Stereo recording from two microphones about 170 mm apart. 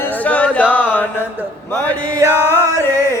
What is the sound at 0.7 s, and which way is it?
Mantra, 10° left (ahead or behind).